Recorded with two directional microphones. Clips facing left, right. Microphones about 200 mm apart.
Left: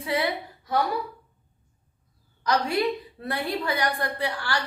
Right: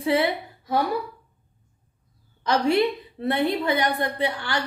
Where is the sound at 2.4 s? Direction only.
25° right (ahead or behind).